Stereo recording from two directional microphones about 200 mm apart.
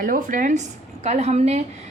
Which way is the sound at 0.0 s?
45° right (ahead or behind).